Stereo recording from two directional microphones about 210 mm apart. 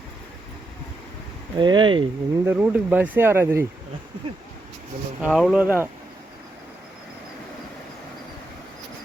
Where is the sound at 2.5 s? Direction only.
10° right (ahead or behind).